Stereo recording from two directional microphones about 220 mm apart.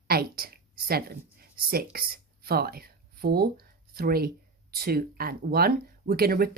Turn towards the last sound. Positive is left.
turn(degrees=-45)  # may be behind; listen again after turning